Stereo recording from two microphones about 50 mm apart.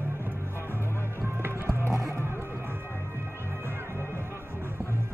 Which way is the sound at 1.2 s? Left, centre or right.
Right.